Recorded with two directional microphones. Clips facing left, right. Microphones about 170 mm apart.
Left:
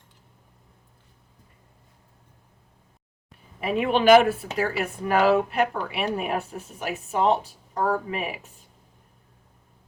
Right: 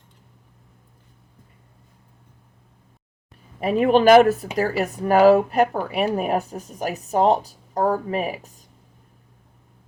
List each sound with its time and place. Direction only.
3.6 s speech: 40° right (ahead or behind)